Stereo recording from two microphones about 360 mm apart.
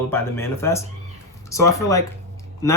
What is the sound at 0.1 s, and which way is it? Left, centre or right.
Speech, centre.